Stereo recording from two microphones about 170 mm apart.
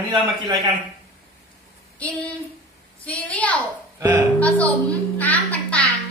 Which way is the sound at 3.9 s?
20° right (ahead or behind).